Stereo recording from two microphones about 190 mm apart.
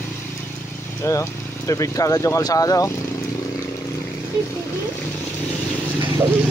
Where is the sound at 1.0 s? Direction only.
15° left (ahead or behind).